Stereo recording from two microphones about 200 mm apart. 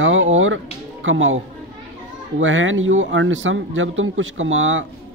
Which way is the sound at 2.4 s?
75° right (ahead or behind).